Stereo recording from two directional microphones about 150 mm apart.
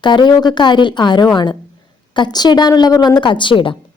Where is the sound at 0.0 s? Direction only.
30° left (ahead or behind).